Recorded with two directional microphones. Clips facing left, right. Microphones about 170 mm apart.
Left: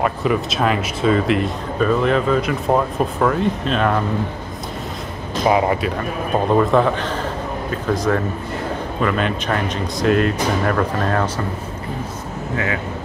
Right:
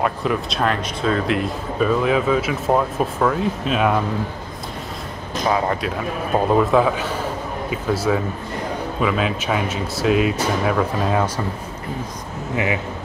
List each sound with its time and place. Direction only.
0.0 s speech: centre (ahead or behind)
5.8 s speech: centre (ahead or behind)
12.5 s speech: 15° right (ahead or behind)